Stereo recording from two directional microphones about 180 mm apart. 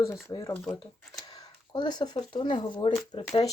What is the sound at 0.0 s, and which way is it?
Speech, 20° left (ahead or behind).